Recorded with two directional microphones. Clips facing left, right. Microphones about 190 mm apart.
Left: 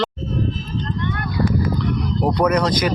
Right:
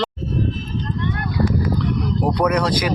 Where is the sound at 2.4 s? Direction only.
5° right (ahead or behind).